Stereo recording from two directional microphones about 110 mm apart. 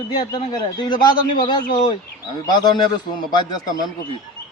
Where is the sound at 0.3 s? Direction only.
40° left (ahead or behind).